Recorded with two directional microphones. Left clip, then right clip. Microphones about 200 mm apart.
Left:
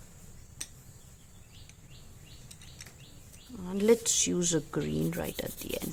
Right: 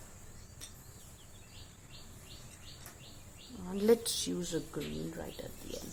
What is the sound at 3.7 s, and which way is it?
Speech, 30° left (ahead or behind).